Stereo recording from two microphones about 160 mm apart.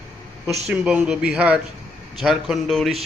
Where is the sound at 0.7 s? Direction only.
5° right (ahead or behind).